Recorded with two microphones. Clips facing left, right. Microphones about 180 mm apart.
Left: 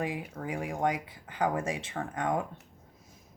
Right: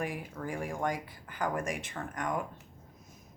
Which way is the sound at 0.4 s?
20° left (ahead or behind).